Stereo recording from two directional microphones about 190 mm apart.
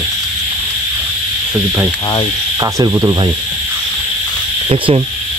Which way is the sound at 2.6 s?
20° right (ahead or behind).